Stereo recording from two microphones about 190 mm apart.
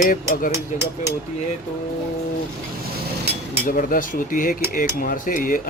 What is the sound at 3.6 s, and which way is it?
Speech, 45° left (ahead or behind).